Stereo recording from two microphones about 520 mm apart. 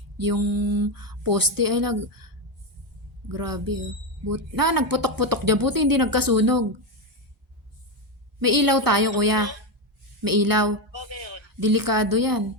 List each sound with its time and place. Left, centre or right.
0.2 s a woman's voice: right
8.4 s a woman's voice: right
10.9 s speech: right
11.6 s a woman's voice: right